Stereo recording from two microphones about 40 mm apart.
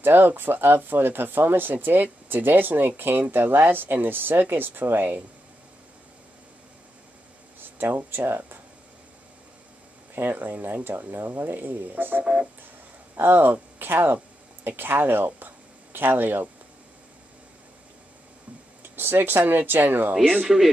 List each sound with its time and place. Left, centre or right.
0.0 s speech: right
7.6 s speech: right
10.3 s speech: right
13.1 s a sound: right
14.8 s speech: right
18.8 s speech: right